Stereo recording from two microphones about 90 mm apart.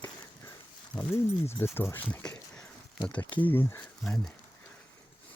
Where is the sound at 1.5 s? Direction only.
25° left (ahead or behind).